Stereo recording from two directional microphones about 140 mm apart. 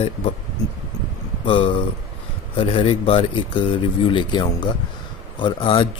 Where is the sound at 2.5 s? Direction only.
40° left (ahead or behind).